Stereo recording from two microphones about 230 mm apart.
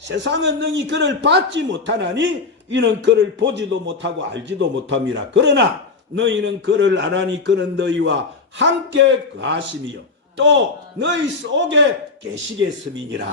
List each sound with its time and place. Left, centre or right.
0.2 s a man's voice: right